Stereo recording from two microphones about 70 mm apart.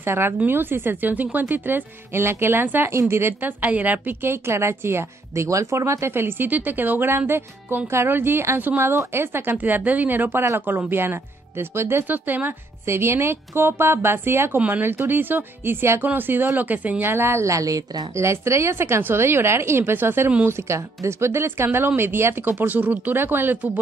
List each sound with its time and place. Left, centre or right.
0.0 s a woman's voice: right
12.8 s a woman's voice: right
18.1 s a woman's voice: right
20.4 s a woman's voice: right